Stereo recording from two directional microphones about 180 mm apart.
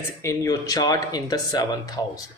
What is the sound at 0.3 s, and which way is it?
A man's voice, 20° left (ahead or behind).